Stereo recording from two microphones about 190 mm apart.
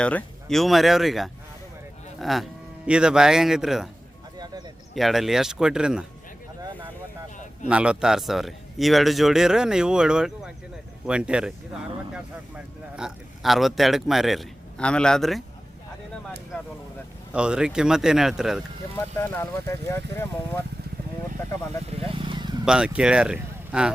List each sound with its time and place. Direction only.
0.0 s speech: 5° left (ahead or behind)
4.9 s speech: centre (ahead or behind)
6.6 s a sound: 10° right (ahead or behind)
7.7 s speech: 5° right (ahead or behind)
13.0 s speech: centre (ahead or behind)
17.3 s speech: 5° right (ahead or behind)
18.9 s speech: 10° left (ahead or behind)
22.0 s vehicle: 30° right (ahead or behind)
22.6 s speech: 5° right (ahead or behind)